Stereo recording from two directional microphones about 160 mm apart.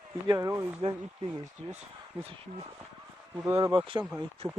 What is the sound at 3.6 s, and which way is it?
Speech, 30° right (ahead or behind).